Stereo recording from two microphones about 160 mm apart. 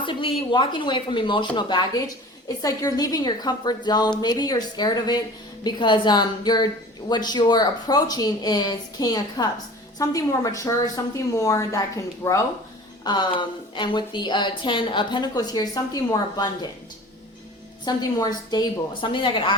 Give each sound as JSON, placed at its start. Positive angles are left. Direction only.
{"t": 0.0, "sound": "a woman's voice", "side_deg": 30}
{"t": 17.8, "sound": "a woman's voice", "side_deg": 25}